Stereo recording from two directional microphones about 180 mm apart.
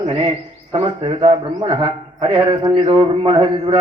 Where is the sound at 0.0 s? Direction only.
30° right (ahead or behind).